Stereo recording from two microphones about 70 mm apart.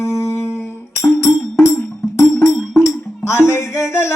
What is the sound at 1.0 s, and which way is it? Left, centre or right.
Music, left.